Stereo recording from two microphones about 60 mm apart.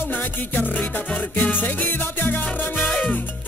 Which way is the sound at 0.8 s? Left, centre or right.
Centre.